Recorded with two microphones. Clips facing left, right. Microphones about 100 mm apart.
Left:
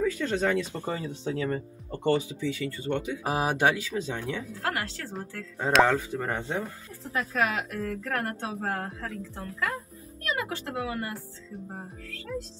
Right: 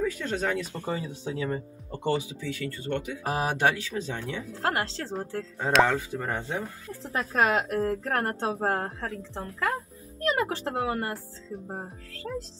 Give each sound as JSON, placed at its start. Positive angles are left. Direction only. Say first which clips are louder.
{"t": 0.0, "sound": "speech", "louder": "left 2 dB", "side_deg": -5}
{"t": 2.5, "sound": "speech", "louder": "right 2 dB", "side_deg": 15}
{"t": 4.6, "sound": "a woman's voice", "louder": "right 7 dB", "side_deg": -30}
{"t": 5.6, "sound": "speech", "louder": "left 1 dB", "side_deg": 0}
{"t": 7.0, "sound": "speech", "louder": "right 2 dB", "side_deg": -35}